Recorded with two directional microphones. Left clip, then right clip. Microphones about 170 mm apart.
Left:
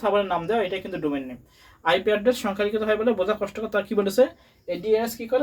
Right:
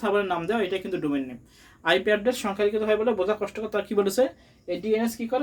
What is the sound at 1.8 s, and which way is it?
Speech, 30° right (ahead or behind).